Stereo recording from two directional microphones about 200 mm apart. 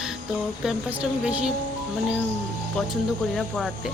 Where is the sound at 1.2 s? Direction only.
5° right (ahead or behind).